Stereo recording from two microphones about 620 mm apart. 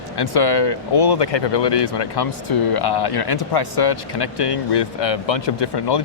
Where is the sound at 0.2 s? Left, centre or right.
Left.